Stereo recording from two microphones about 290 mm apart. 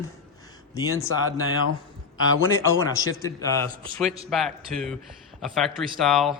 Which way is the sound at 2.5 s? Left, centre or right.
Centre.